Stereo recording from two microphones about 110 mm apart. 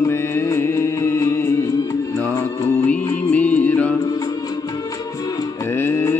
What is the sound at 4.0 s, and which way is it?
Music, 35° left (ahead or behind).